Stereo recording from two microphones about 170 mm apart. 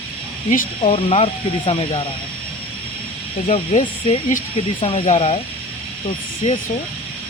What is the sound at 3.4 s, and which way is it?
Speech, 40° left (ahead or behind).